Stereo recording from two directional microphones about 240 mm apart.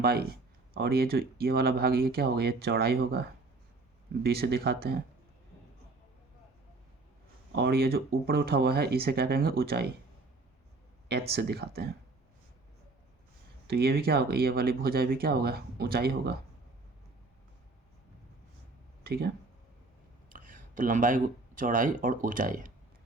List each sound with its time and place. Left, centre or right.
0.0 s speech: right
7.5 s speech: right
11.3 s speech: right
13.7 s speech: right
19.0 s speech: right
20.3 s speech: right